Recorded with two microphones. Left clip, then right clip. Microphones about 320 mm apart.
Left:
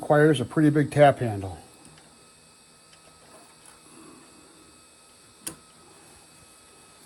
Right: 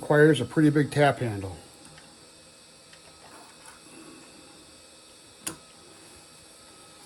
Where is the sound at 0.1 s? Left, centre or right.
Centre.